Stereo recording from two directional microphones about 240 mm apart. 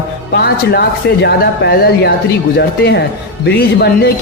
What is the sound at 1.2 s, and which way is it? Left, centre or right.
Speech, left.